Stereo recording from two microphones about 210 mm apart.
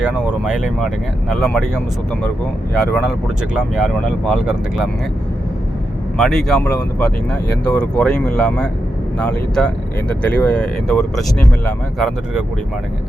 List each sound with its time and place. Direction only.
0.0 s speech: 5° right (ahead or behind)
6.1 s speech: centre (ahead or behind)